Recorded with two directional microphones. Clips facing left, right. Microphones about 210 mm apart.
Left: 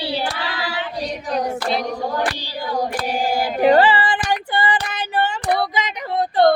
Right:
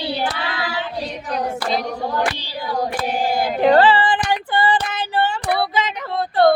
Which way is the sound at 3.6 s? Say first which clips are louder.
Even; 10° left (ahead or behind).